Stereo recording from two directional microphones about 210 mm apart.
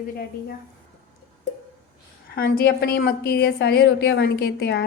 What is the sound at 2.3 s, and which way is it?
A woman's voice, 50° left (ahead or behind).